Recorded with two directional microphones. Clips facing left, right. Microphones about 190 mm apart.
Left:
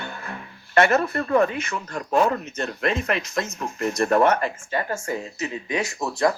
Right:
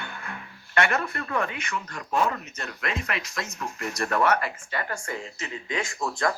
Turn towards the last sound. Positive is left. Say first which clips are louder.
# left 5 dB
turn(degrees=20)  # may be behind; listen again after turning